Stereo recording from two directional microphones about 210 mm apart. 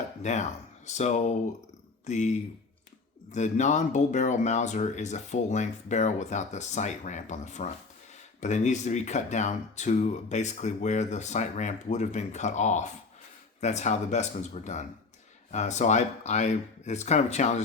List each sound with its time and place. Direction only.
0.2 s speech: 35° left (ahead or behind)